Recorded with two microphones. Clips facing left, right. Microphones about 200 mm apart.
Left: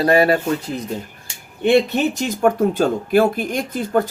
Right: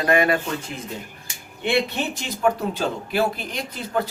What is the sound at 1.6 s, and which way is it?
Speech, 45° left (ahead or behind).